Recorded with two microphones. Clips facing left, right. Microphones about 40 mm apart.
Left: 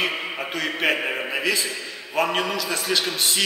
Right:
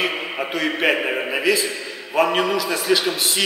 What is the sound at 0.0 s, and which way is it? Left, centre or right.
A man's voice, centre.